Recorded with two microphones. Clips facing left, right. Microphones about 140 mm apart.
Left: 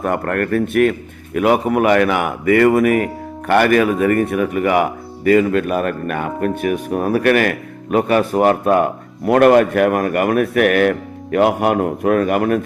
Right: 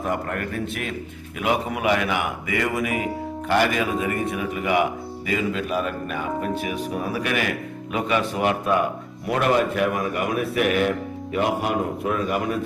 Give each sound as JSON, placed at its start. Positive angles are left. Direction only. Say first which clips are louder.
{"t": 0.0, "sound": "speech", "louder": "left 7 dB", "side_deg": 60}